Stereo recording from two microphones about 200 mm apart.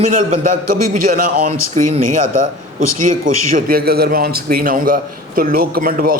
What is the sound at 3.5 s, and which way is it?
A man's voice, 50° right (ahead or behind).